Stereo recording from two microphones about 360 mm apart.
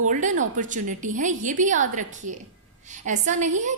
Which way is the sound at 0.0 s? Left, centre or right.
Right.